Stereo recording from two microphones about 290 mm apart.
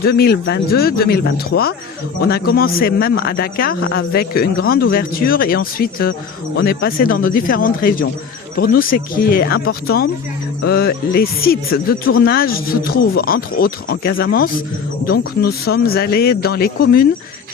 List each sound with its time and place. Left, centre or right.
0.0 s speech: left